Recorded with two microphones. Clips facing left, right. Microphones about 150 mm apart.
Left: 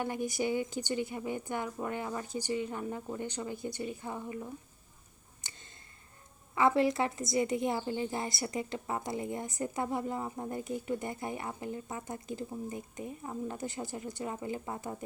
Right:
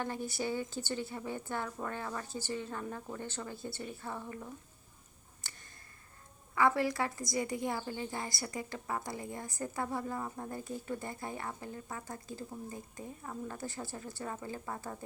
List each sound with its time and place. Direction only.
0.0 s a woman's voice: 15° left (ahead or behind)
5.4 s a sound: 20° left (ahead or behind)
6.5 s a woman's voice: 20° left (ahead or behind)